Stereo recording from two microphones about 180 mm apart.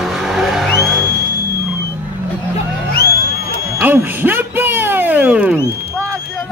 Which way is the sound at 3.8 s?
10° right (ahead or behind).